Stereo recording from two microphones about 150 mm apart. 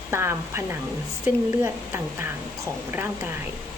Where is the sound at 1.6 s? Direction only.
15° right (ahead or behind).